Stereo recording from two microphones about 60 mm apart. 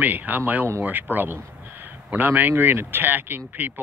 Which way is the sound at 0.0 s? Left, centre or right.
Right.